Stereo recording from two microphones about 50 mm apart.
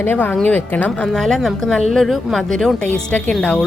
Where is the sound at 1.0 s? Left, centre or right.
Centre.